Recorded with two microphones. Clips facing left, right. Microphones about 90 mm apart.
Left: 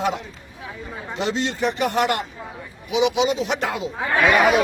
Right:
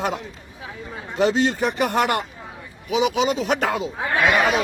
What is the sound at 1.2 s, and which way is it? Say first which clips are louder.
Speech: right 4 dB; 50° right (ahead or behind).